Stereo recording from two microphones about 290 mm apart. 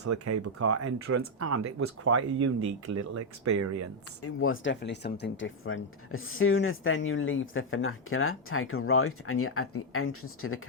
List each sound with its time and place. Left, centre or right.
0.0 s speech: right
2.6 s speech: right
4.2 s speech: left